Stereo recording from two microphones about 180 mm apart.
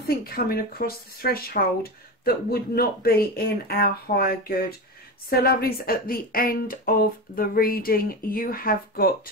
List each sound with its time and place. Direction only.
0.0 s speech: 55° left (ahead or behind)